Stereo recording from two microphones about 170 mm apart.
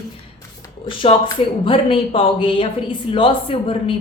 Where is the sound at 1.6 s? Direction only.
30° left (ahead or behind).